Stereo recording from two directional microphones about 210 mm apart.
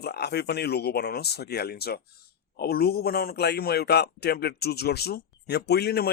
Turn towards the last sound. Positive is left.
turn(degrees=50)  # may be behind; listen again after turning